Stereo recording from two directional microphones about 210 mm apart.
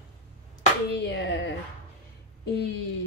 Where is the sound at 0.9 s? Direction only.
55° left (ahead or behind).